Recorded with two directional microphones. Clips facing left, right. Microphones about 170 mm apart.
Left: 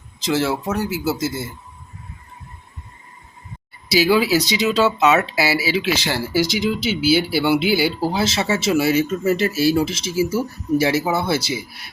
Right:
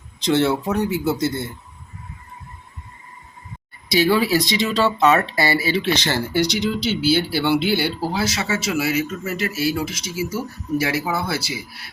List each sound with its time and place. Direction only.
0.2 s speech: 5° left (ahead or behind)
4.0 s speech: 5° left (ahead or behind)
8.1 s speech: 25° left (ahead or behind)